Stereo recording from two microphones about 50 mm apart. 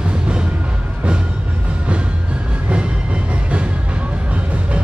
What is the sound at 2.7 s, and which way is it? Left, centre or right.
Music, right.